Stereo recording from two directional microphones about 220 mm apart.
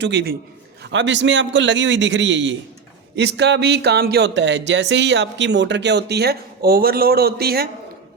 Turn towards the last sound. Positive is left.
turn(degrees=-45)  # may be behind; listen again after turning